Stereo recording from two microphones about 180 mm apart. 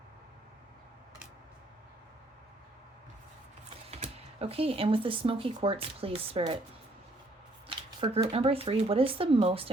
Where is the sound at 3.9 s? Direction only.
35° right (ahead or behind).